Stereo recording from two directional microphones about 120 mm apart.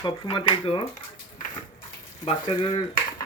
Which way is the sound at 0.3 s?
50° left (ahead or behind).